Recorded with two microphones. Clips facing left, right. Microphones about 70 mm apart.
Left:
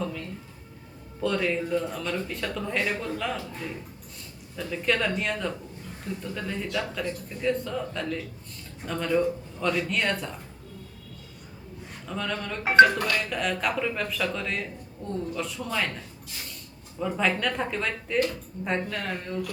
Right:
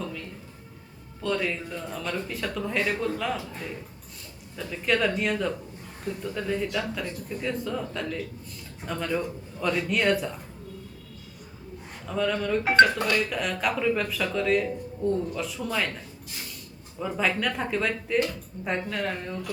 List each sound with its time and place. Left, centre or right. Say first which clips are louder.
0.0 s a sound: left 3 dB; centre
1.2 s speech: left 2 dB; centre
4.5 s speech: even; centre
12.0 s speech: right 5 dB; centre
12.6 s speech: left 3 dB; centre
13.3 s speech: even; centre